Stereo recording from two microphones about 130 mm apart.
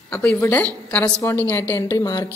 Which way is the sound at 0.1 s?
10° left (ahead or behind).